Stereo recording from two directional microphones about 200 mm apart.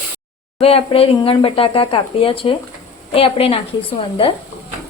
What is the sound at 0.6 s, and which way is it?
A woman's voice, 30° left (ahead or behind).